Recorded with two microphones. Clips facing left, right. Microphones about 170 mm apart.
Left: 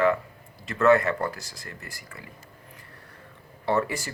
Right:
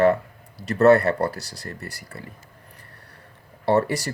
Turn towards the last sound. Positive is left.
turn(degrees=-35)  # may be behind; listen again after turning